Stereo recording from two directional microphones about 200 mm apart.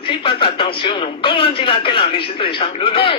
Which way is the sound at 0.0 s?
25° left (ahead or behind).